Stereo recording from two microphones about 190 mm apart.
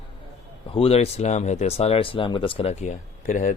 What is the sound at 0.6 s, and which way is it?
Speech, 30° left (ahead or behind).